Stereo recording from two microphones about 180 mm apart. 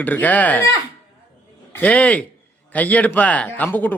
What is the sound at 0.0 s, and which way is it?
Speech, 10° left (ahead or behind).